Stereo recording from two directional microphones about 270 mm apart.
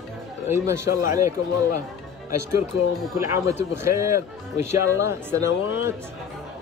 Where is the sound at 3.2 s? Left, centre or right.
Centre.